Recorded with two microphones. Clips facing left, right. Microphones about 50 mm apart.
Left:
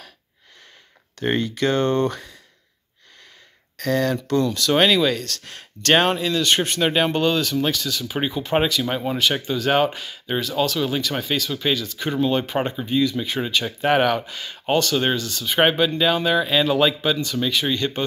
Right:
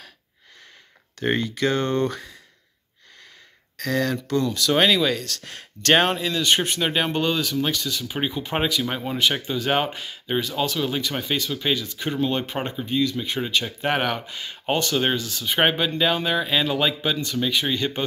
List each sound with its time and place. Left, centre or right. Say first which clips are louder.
1.7 s speech: left 3 dB; left
2.0 s speech: left 2 dB; centre
3.8 s speech: left 3 dB; centre
4.4 s speech: left 1 dB; centre
4.7 s speech: left 2 dB; centre
5.9 s speech: left 3 dB; centre
6.8 s speech: left 4 dB; centre
7.2 s speech: left 3 dB; centre
8.8 s speech: left 3 dB; centre
9.3 s speech: left 3 dB; centre
14.0 s speech: left 5 dB; centre
16.6 s speech: left 4 dB; centre